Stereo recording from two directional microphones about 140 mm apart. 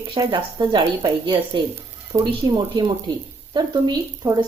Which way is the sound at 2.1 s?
25° right (ahead or behind).